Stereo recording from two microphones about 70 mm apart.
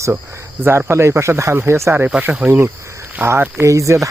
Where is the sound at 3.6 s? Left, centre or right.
Right.